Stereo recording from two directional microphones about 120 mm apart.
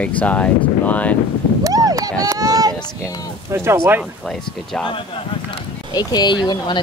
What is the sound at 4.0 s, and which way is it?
Speech, centre (ahead or behind).